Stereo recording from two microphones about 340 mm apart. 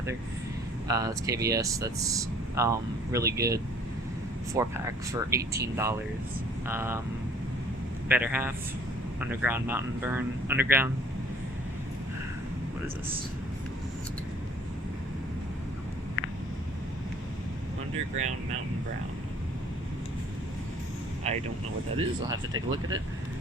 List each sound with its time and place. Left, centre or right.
0.9 s speech: centre
8.0 s speech: centre
21.2 s speech: centre